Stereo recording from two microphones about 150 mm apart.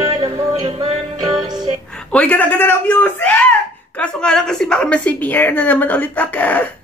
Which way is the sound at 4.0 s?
5° left (ahead or behind).